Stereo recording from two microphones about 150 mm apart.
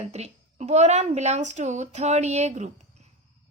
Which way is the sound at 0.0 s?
45° right (ahead or behind).